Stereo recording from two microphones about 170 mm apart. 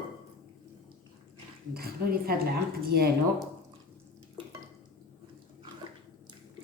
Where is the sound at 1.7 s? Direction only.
65° right (ahead or behind).